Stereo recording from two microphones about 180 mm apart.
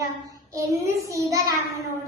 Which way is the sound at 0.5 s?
15° right (ahead or behind).